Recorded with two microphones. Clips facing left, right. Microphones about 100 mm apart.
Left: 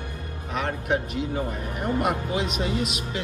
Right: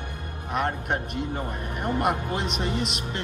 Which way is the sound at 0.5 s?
50° right (ahead or behind).